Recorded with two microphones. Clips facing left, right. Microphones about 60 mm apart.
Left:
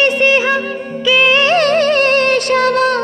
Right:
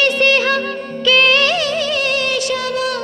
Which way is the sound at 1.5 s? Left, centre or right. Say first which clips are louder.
Left 7 dB; left.